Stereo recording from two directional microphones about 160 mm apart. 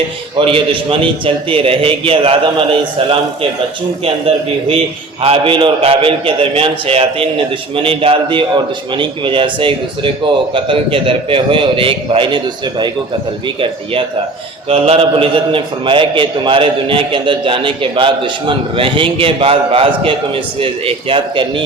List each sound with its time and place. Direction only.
0.3 s a man's voice: 35° right (ahead or behind)
5.2 s a man's voice: 35° right (ahead or behind)
14.7 s a man's voice: 35° right (ahead or behind)